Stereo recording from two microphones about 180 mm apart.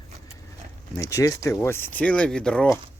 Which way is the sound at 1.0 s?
15° left (ahead or behind).